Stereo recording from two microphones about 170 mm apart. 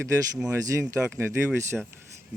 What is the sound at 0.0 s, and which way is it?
Speech, 10° right (ahead or behind).